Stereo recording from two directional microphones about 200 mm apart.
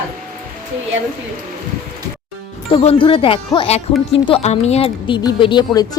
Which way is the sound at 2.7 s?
25° left (ahead or behind).